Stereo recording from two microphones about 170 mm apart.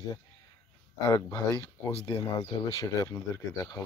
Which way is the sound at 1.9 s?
35° left (ahead or behind).